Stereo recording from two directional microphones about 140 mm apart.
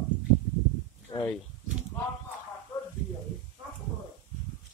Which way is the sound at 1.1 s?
40° left (ahead or behind).